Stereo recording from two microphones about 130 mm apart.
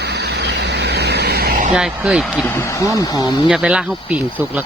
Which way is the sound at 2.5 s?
20° left (ahead or behind).